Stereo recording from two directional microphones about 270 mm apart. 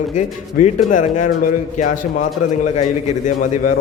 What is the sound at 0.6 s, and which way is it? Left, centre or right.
A man's voice, left.